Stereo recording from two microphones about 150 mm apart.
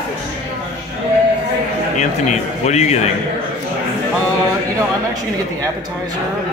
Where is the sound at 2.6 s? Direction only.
50° left (ahead or behind).